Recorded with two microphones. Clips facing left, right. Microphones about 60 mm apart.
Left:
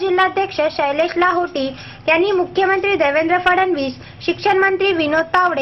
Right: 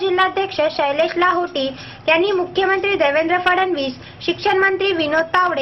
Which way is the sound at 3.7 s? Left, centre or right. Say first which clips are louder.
Left 1 dB; left.